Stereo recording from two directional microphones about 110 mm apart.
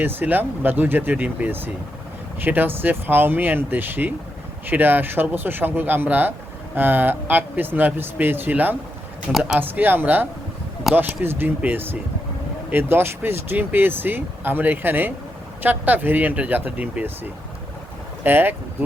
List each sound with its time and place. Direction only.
0.0 s speech: 20° right (ahead or behind)
18.2 s speech: 15° right (ahead or behind)